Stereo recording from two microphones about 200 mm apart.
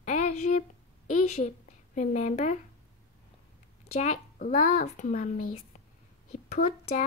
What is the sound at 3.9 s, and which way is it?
A child's voice, 40° left (ahead or behind).